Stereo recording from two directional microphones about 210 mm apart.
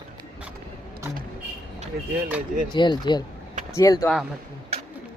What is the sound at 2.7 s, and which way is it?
Speech, 20° left (ahead or behind).